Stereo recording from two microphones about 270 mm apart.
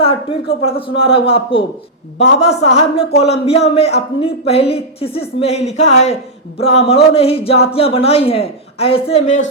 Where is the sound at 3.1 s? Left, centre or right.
Left.